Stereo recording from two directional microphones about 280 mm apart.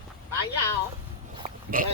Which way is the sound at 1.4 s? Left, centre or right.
Right.